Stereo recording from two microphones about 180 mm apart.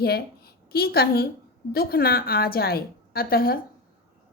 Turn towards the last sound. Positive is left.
turn(degrees=55)  # may be behind; listen again after turning